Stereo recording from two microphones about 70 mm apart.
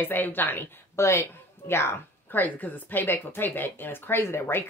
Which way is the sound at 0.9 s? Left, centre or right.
Left.